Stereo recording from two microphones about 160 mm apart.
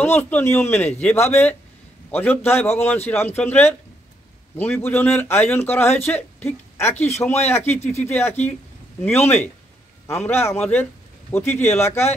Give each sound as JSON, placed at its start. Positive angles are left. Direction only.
{"t": 0.0, "sound": "speech", "side_deg": 10}